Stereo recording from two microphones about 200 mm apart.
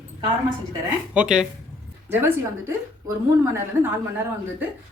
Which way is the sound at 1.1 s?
5° right (ahead or behind).